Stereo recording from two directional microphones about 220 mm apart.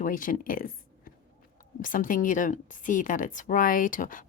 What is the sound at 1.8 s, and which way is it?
Speech, 40° left (ahead or behind).